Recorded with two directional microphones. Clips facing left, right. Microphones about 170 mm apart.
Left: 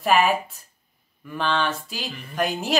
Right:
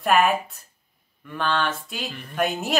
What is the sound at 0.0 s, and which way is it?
Speech, centre (ahead or behind).